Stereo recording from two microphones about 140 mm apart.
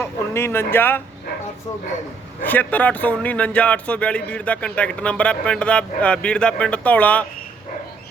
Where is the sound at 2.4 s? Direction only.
10° left (ahead or behind).